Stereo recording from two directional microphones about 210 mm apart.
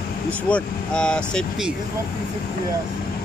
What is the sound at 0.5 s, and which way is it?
Speech, 5° left (ahead or behind).